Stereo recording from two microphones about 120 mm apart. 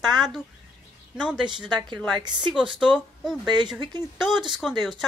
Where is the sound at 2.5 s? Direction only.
5° right (ahead or behind).